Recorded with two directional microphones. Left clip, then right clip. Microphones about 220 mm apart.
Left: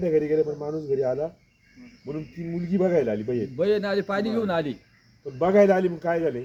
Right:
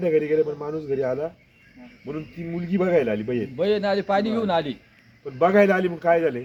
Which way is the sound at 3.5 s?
20° left (ahead or behind).